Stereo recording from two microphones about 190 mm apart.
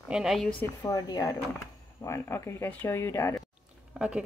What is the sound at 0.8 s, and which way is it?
Speech, 20° left (ahead or behind).